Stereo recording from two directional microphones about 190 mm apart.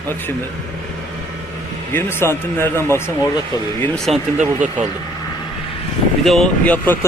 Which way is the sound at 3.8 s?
Centre (ahead or behind).